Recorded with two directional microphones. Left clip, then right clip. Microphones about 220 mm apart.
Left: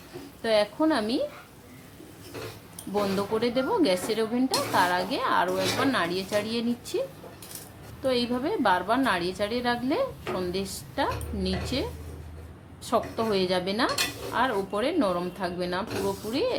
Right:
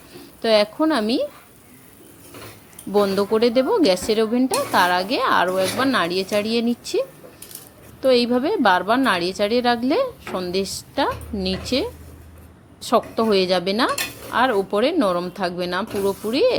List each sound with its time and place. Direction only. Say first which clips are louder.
0.4 s speech: right 6 dB; 30° right (ahead or behind)
2.9 s speech: right 9 dB; 30° right (ahead or behind)
8.0 s a woman's voice: right 9 dB; 30° right (ahead or behind)